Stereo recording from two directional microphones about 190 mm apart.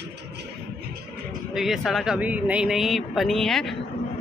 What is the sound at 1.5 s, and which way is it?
Speech, centre (ahead or behind).